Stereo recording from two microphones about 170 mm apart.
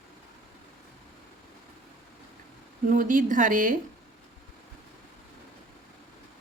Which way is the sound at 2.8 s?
50° right (ahead or behind).